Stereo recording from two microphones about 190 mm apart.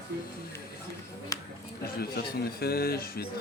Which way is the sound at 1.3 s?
15° left (ahead or behind).